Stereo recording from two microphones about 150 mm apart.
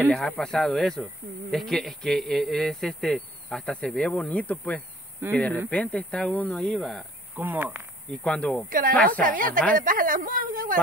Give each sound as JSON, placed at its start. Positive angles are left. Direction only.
{"t": 0.1, "sound": "speech", "side_deg": 5}
{"t": 7.3, "sound": "speech", "side_deg": -15}
{"t": 8.1, "sound": "speech", "side_deg": 5}
{"t": 8.6, "sound": "a man's voice", "side_deg": -65}